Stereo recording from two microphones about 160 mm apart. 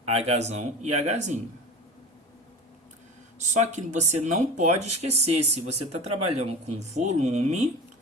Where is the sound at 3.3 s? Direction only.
45° right (ahead or behind).